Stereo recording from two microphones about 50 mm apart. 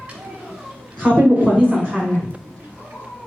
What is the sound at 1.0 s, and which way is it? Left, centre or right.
Speech, right.